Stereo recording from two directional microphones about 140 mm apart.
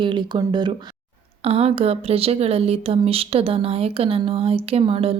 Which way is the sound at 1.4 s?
45° right (ahead or behind).